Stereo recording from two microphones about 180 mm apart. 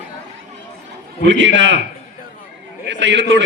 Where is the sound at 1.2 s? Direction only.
90° right.